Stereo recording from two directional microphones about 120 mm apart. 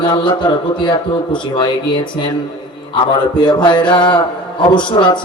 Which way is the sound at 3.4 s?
40° left (ahead or behind).